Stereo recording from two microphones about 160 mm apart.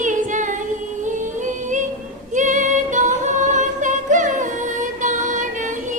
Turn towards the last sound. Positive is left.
turn(degrees=-50)  # may be behind; listen again after turning